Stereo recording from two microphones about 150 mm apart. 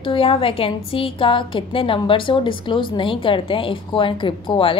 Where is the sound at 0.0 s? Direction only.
35° left (ahead or behind).